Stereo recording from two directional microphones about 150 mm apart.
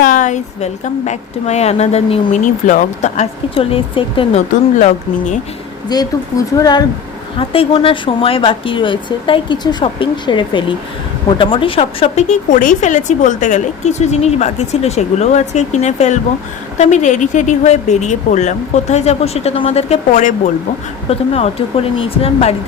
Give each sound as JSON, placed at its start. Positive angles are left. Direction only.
{"t": 0.0, "sound": "speech", "side_deg": 60}
{"t": 2.4, "sound": "speech", "side_deg": 55}
{"t": 3.5, "sound": "speech", "side_deg": 40}
{"t": 4.8, "sound": "speech", "side_deg": 55}
{"t": 5.9, "sound": "speech", "side_deg": 25}
{"t": 7.3, "sound": "speech", "side_deg": 40}